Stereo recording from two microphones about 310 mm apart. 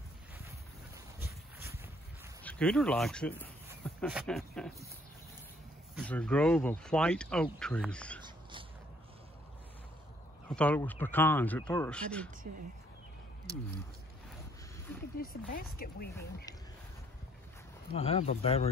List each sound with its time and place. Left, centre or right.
1.2 s a sound: centre
2.4 s speech: centre
5.9 s speech: centre
10.5 s speech: centre
15.8 s speech: left
17.9 s speech: centre